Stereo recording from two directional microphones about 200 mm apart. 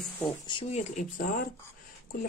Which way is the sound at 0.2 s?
25° left (ahead or behind).